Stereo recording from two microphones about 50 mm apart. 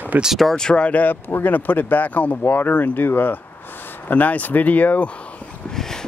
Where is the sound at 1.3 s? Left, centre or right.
Left.